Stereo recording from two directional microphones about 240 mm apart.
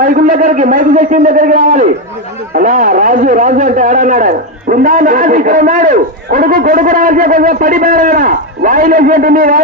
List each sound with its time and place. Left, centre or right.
0.0 s a man's voice: right